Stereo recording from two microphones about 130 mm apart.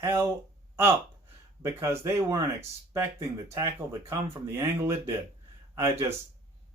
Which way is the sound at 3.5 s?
20° right (ahead or behind).